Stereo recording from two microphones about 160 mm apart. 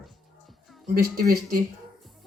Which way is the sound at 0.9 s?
65° right (ahead or behind).